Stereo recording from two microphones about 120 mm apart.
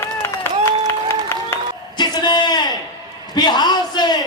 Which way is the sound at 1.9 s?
35° left (ahead or behind).